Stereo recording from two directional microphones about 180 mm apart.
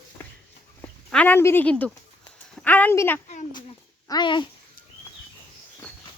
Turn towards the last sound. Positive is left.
turn(degrees=25)  # may be behind; listen again after turning